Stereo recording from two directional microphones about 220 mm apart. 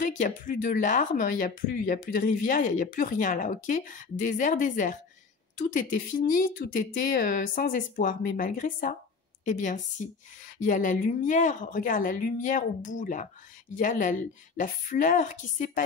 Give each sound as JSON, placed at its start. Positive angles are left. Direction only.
{"t": 0.0, "sound": "speech", "side_deg": 35}